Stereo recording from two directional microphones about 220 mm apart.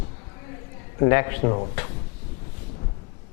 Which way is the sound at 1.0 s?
15° left (ahead or behind).